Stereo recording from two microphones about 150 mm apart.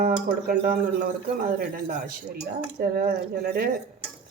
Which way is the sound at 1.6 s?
85° right.